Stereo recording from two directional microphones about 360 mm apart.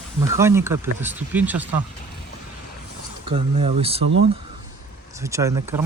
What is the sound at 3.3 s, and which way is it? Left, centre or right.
Speech, centre.